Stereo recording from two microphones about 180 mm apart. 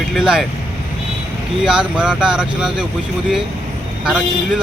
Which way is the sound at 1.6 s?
5° right (ahead or behind).